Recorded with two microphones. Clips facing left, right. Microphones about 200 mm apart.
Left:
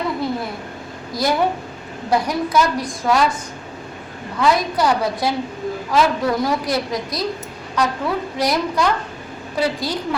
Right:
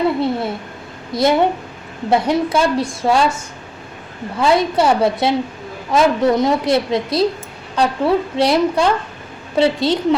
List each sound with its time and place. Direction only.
0.2 s a woman's voice: 25° right (ahead or behind)
4.4 s a woman's voice: 25° right (ahead or behind)